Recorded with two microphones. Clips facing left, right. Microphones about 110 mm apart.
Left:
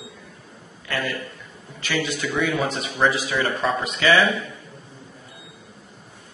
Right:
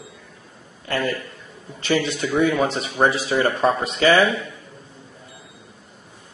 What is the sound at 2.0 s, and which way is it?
A man's voice, 30° right (ahead or behind).